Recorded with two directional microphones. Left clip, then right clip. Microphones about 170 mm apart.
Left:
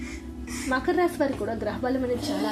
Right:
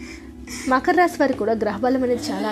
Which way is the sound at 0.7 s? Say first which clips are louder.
Right 7 dB; 40° right (ahead or behind).